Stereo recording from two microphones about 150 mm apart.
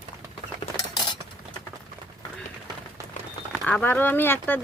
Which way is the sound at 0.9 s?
30° left (ahead or behind).